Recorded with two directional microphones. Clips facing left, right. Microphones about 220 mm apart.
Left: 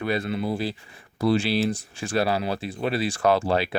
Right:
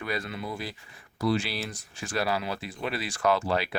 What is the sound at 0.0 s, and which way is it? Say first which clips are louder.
Speech: left 7 dB; 30° left (ahead or behind).